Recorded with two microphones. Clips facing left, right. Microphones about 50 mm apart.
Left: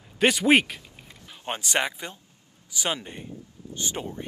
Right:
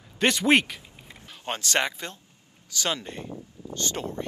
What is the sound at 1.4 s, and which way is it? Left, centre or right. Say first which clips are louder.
Speech: even; centre.